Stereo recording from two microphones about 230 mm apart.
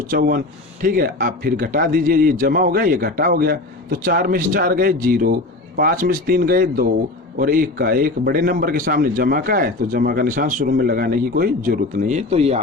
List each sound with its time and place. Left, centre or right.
0.1 s speech: right